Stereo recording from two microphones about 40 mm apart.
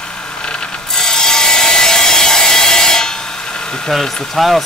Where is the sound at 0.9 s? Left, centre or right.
Centre.